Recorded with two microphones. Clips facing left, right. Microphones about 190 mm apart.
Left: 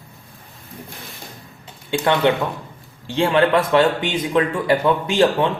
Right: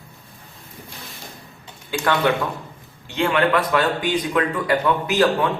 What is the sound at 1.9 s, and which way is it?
Speech, 25° left (ahead or behind).